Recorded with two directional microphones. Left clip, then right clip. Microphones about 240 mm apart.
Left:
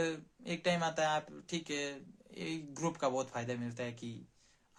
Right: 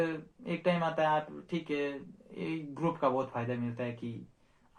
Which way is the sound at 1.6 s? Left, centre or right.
Left.